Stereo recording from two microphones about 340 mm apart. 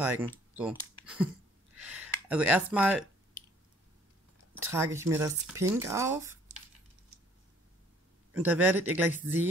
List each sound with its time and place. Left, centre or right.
0.0 s speech: centre
4.6 s speech: centre
8.3 s speech: centre